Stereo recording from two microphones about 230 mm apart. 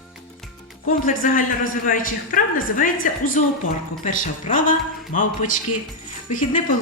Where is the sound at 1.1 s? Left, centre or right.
Left.